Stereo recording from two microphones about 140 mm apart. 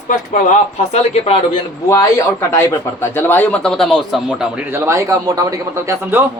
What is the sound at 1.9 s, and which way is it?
Speech, 20° left (ahead or behind).